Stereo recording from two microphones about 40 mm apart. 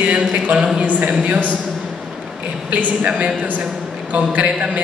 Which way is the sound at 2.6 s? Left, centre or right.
Right.